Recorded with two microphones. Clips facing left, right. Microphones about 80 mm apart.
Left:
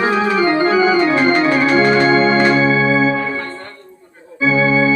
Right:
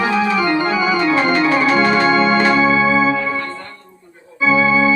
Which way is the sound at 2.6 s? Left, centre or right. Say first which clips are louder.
Even; left.